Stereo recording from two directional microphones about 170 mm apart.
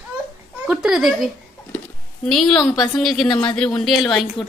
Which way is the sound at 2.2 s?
Centre (ahead or behind).